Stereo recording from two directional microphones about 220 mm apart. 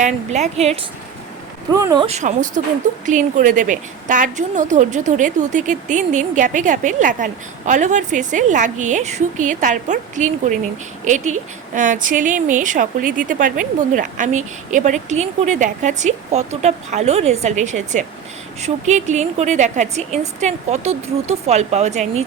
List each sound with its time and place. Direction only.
0.0 s a woman's voice: 30° right (ahead or behind)
1.7 s speech: 15° right (ahead or behind)
2.0 s a woman's voice: 30° right (ahead or behind)